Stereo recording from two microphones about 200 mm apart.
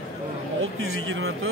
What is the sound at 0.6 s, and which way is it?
Speech, 90° right.